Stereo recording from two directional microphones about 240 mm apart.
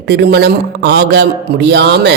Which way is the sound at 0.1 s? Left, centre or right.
Right.